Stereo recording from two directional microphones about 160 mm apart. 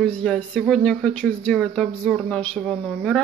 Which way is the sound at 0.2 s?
5° left (ahead or behind).